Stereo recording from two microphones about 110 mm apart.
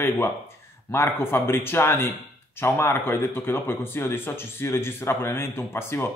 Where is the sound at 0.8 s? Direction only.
20° left (ahead or behind).